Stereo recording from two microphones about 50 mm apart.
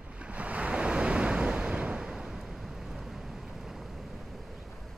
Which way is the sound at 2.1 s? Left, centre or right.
Centre.